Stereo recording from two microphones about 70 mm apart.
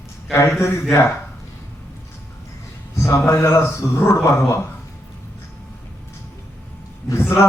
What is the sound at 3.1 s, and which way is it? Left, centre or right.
A man's voice, left.